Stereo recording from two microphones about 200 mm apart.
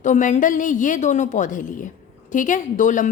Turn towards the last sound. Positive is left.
turn(degrees=40)  # may be behind; listen again after turning